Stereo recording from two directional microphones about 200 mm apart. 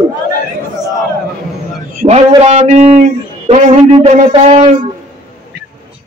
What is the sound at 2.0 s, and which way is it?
Speech, 30° right (ahead or behind).